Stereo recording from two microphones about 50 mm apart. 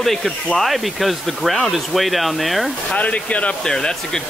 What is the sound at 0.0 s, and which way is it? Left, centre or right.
Speech, centre.